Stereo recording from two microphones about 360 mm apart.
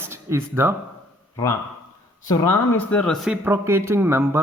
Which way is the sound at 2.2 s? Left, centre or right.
Centre.